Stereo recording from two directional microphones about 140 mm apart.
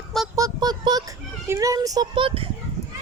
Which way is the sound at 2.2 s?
40° right (ahead or behind).